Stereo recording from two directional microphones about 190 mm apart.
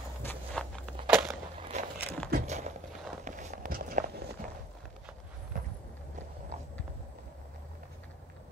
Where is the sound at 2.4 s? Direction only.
35° right (ahead or behind).